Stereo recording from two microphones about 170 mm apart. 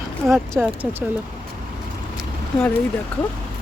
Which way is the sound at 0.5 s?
5° right (ahead or behind).